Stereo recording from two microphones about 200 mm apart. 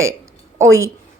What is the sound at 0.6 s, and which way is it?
Speech, 15° right (ahead or behind).